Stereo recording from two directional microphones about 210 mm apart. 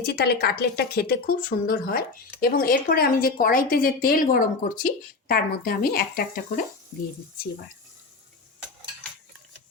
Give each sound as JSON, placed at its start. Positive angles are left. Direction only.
{"t": 0.0, "sound": "a woman's voice", "side_deg": 50}